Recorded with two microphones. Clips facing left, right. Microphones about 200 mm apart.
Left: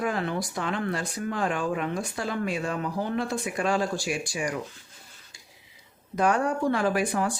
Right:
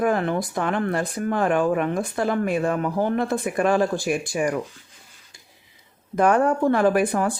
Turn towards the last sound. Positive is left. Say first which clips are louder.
# right 6 dB
turn(degrees=-55)  # may be behind; listen again after turning